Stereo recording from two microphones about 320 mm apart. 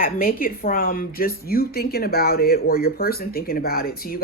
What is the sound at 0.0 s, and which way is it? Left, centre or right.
A woman's voice, left.